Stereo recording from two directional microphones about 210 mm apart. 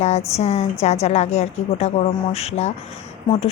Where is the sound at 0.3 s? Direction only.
30° left (ahead or behind).